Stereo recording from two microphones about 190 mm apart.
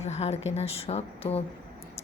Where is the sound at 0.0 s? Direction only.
35° left (ahead or behind).